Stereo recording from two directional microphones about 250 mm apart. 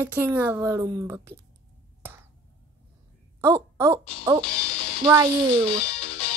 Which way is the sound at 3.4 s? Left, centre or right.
Centre.